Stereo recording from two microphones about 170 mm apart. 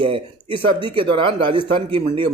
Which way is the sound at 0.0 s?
30° right (ahead or behind).